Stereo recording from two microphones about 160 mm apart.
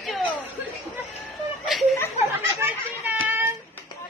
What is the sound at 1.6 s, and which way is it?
Laughter, centre (ahead or behind).